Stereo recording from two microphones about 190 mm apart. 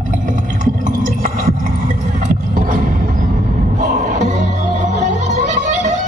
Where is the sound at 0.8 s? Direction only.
45° right (ahead or behind).